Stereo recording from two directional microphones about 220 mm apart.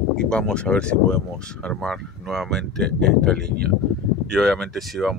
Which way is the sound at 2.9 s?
50° right (ahead or behind).